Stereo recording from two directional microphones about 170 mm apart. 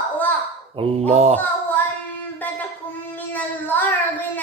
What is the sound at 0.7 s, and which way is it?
Speech, 40° right (ahead or behind).